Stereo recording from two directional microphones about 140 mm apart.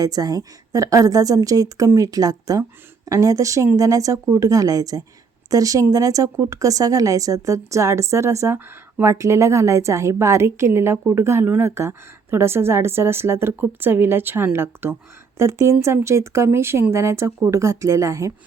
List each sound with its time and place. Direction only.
0.0 s speech: 25° right (ahead or behind)